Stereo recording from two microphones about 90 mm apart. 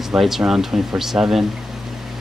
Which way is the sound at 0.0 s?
5° right (ahead or behind).